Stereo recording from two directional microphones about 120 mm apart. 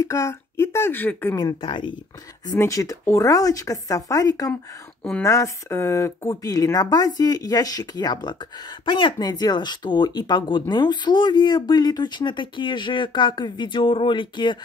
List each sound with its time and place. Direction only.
0.0 s speech: 25° left (ahead or behind)
1.3 s speech: 30° left (ahead or behind)
1.6 s speech: 40° left (ahead or behind)
2.5 s speech: 25° left (ahead or behind)